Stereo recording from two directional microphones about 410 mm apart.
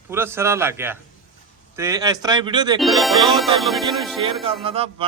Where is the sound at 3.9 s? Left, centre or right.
Centre.